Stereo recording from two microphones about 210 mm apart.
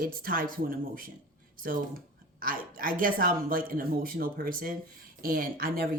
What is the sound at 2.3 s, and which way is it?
A woman's voice, 45° right (ahead or behind).